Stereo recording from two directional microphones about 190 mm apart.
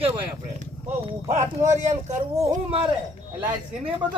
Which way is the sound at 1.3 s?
40° right (ahead or behind).